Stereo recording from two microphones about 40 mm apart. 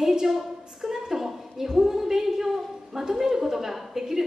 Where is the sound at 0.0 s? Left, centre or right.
Centre.